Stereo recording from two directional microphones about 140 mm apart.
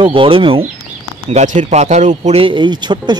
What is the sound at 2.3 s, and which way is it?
Speech, 35° right (ahead or behind).